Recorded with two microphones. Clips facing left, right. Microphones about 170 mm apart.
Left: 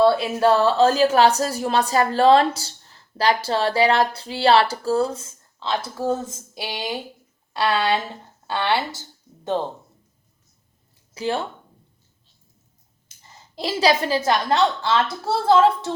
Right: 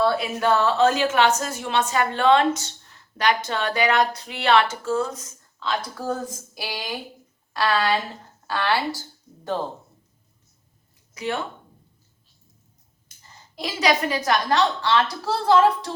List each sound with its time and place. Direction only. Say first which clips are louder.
0.0 s a woman's voice: left 5 dB; 30° left (ahead or behind)
11.1 s speech: left 3 dB; 30° left (ahead or behind)
13.6 s a woman's voice: left 3 dB; 30° left (ahead or behind)